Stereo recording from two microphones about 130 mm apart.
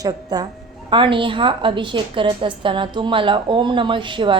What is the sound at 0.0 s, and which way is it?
A woman's voice, 30° right (ahead or behind).